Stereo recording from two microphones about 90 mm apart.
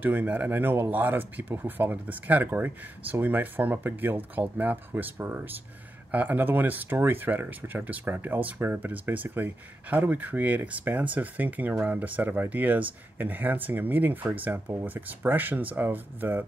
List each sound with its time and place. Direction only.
0.0 s speech: 20° right (ahead or behind)